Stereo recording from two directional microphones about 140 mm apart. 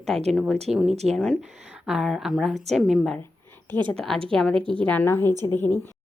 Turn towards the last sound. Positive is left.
turn(degrees=15)  # may be behind; listen again after turning